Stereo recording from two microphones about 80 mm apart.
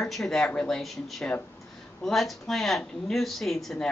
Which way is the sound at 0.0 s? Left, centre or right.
Centre.